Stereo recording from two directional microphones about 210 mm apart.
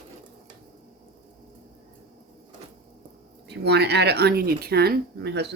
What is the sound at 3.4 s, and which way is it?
Speech, 55° right (ahead or behind).